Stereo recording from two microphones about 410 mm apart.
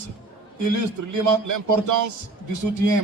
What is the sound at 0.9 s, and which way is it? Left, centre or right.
A man's voice, right.